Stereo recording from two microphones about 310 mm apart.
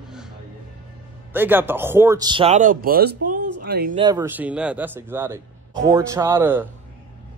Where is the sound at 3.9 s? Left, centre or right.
Centre.